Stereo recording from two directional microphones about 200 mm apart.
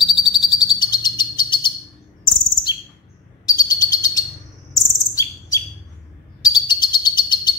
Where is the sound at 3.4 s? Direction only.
20° left (ahead or behind).